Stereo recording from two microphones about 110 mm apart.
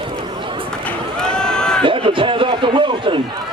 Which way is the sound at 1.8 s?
50° right (ahead or behind).